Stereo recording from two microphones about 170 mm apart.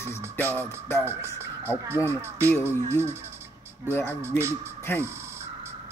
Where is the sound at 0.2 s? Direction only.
15° right (ahead or behind).